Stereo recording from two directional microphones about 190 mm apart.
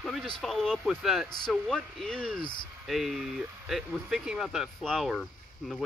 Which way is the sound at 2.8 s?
Centre (ahead or behind).